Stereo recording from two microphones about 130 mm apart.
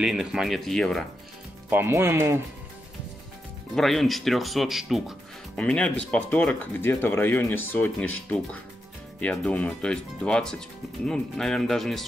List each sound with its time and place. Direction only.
0.0 s speech: 5° right (ahead or behind)
1.7 s speech: 20° right (ahead or behind)
3.7 s speech: centre (ahead or behind)
5.6 s speech: 10° left (ahead or behind)